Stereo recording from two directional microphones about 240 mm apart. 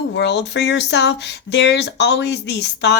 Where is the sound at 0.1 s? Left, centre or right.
Left.